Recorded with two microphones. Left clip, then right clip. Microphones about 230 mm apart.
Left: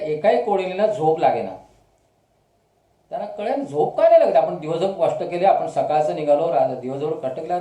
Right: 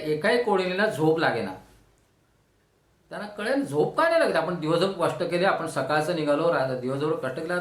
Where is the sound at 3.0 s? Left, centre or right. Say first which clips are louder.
Left 4 dB; right.